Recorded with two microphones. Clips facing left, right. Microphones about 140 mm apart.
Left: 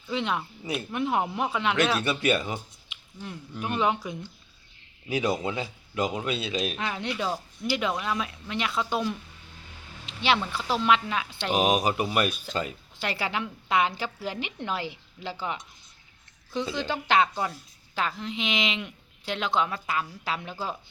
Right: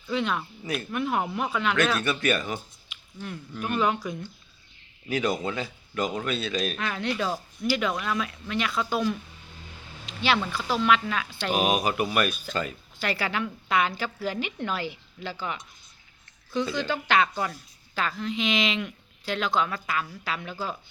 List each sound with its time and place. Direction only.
0.1 s a woman's voice: 25° left (ahead or behind)
10.1 s a sound: 25° left (ahead or behind)
10.5 s a woman's voice: 25° left (ahead or behind)